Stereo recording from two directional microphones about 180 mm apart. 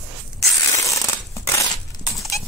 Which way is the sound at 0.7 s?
15° left (ahead or behind).